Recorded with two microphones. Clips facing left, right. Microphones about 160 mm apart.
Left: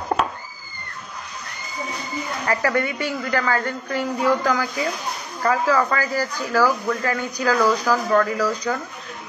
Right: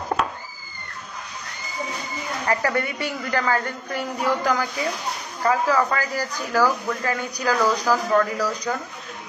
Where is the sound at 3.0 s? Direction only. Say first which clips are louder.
Left 1 dB; 20° right (ahead or behind).